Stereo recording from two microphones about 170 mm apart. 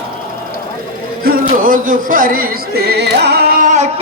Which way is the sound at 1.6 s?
55° right (ahead or behind).